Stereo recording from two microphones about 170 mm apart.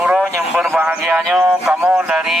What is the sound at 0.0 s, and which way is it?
Speech, 5° right (ahead or behind).